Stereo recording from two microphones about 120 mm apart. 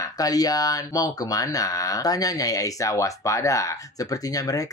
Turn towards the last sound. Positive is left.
turn(degrees=30)  # may be behind; listen again after turning